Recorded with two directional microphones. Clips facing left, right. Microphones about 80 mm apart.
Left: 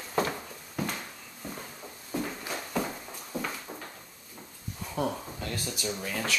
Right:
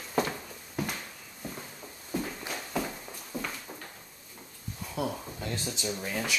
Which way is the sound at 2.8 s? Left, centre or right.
Centre.